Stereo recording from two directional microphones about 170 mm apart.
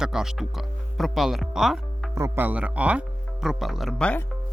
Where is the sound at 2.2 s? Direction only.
15° right (ahead or behind).